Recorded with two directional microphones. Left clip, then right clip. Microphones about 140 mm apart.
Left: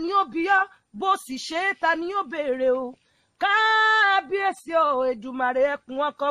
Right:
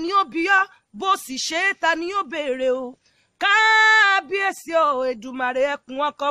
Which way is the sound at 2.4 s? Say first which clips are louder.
Left 1 dB; 50° right (ahead or behind).